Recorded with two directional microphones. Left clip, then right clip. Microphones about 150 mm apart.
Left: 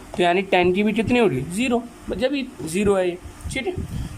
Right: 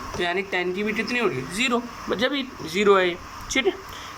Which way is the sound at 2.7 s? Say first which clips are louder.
Right 2 dB; 45° left (ahead or behind).